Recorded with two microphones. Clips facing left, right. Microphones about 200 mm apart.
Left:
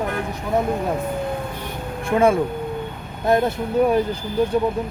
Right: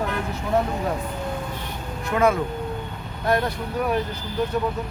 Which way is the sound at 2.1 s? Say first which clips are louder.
Left 4 dB; 30° left (ahead or behind).